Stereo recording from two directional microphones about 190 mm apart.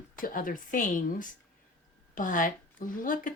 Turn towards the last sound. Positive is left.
turn(degrees=45)  # may be behind; listen again after turning